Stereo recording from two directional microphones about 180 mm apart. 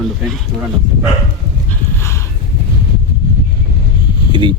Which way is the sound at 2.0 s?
15° left (ahead or behind).